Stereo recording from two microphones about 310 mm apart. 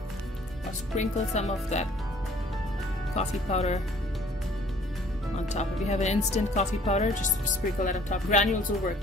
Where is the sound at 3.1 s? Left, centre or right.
Left.